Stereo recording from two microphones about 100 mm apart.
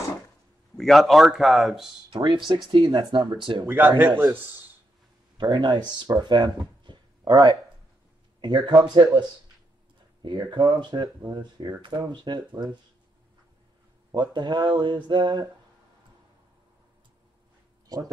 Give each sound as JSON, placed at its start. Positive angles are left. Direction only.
{"t": 0.7, "sound": "speech", "side_deg": 0}
{"t": 2.1, "sound": "speech", "side_deg": -50}
{"t": 3.6, "sound": "speech", "side_deg": -20}
{"t": 5.4, "sound": "speech", "side_deg": -45}
{"t": 10.2, "sound": "speech", "side_deg": -45}
{"t": 14.1, "sound": "speech", "side_deg": -50}
{"t": 17.8, "sound": "speech", "side_deg": -40}